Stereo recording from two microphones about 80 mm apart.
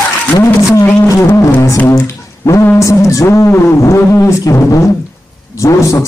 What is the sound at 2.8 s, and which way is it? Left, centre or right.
Speech, left.